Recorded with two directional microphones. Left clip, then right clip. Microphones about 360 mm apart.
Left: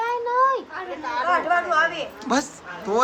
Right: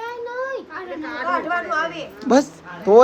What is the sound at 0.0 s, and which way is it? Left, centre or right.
Children playing, left.